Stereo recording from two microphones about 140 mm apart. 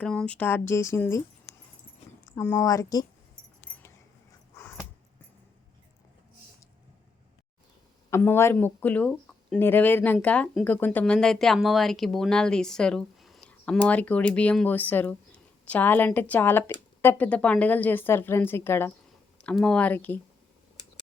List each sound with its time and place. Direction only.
0.0 s speech: 5° left (ahead or behind)
2.4 s a woman's voice: 20° left (ahead or behind)
8.1 s speech: 15° left (ahead or behind)